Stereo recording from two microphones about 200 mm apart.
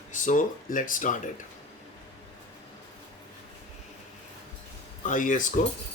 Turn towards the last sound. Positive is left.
turn(degrees=40)  # may be behind; listen again after turning